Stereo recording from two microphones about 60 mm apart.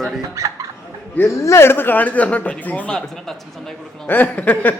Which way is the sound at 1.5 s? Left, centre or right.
Left.